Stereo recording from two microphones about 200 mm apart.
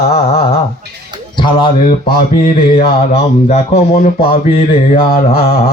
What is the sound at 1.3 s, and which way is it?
Speech, 25° left (ahead or behind).